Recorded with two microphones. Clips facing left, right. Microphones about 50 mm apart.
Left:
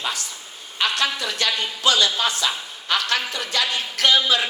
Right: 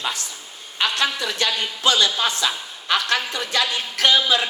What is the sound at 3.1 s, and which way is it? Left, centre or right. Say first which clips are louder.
Speech: right 1 dB; right.